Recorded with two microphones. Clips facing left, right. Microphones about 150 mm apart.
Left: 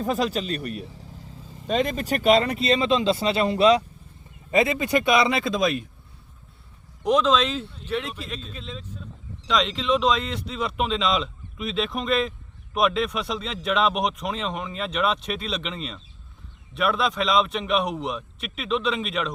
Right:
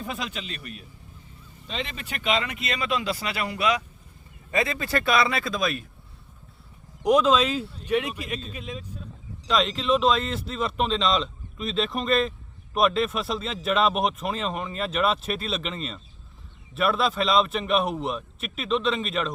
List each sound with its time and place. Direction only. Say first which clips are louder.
0.0 s speech: left 9 dB; 40° left (ahead or behind)
0.9 s vehicle: left 7 dB; 90° left
1.6 s speech: left 10 dB; 45° left (ahead or behind); by 5.8 s 20° left (ahead or behind)
7.0 s speech: right 1 dB; 10° right (ahead or behind)